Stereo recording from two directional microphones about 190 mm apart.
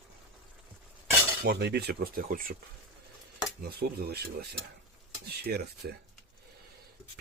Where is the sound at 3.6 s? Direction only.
55° right (ahead or behind).